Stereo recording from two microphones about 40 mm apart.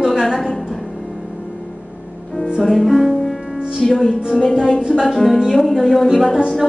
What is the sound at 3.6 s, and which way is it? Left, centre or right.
Music, right.